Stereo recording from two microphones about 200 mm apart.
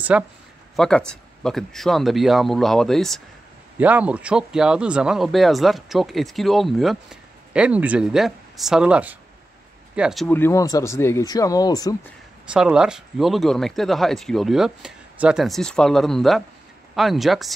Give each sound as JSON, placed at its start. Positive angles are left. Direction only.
{"t": 0.1, "sound": "speech", "side_deg": -5}
{"t": 0.7, "sound": "speech", "side_deg": 5}
{"t": 10.2, "sound": "speech", "side_deg": 10}
{"t": 12.5, "sound": "speech", "side_deg": -5}